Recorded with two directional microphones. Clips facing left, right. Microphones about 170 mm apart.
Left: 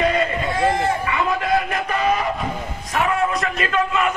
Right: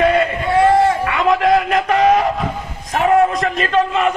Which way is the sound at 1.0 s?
75° right (ahead or behind).